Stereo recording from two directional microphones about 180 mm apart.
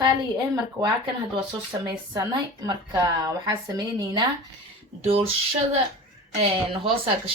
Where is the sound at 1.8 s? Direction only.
20° right (ahead or behind).